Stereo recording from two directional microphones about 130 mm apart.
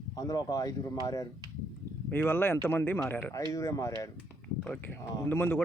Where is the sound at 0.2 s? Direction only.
30° left (ahead or behind).